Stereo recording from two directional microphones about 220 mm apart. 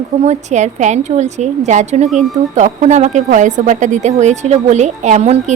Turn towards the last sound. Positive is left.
turn(degrees=-30)  # may be behind; listen again after turning